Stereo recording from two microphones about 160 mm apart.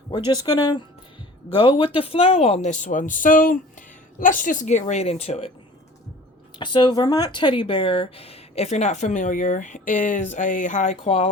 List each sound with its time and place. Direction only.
0.3 s speech: 25° left (ahead or behind)
6.6 s speech: 30° left (ahead or behind); by 10.9 s 50° left (ahead or behind)
11.0 s speech: 40° left (ahead or behind)